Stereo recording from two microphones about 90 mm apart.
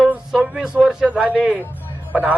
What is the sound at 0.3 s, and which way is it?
A man's voice, 5° right (ahead or behind).